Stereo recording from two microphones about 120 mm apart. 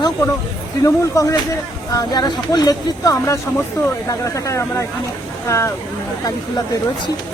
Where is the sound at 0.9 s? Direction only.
25° left (ahead or behind).